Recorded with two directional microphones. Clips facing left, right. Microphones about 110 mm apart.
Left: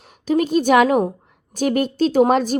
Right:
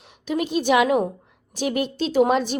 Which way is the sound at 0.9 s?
35° left (ahead or behind).